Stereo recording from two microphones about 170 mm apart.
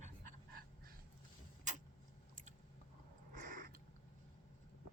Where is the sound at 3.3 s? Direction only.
50° right (ahead or behind).